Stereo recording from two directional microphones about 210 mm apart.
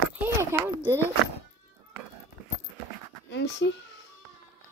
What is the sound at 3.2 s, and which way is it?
Speech, 55° left (ahead or behind).